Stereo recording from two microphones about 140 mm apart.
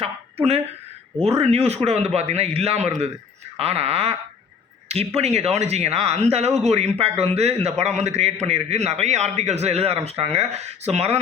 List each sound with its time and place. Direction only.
0.0 s a man's voice: 45° right (ahead or behind)